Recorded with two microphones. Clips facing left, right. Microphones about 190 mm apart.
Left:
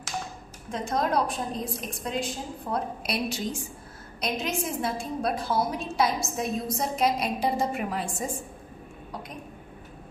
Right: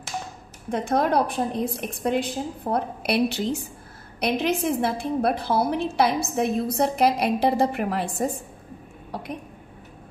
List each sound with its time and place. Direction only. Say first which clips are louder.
0.7 s a woman's voice: right 5 dB; 60° right (ahead or behind)